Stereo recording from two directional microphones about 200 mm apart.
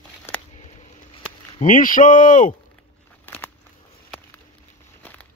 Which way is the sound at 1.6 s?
40° left (ahead or behind).